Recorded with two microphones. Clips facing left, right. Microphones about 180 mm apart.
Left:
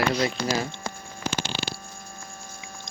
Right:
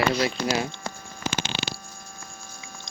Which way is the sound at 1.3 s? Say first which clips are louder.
Even; 80° right.